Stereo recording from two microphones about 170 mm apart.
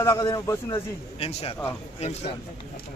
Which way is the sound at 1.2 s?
35° left (ahead or behind).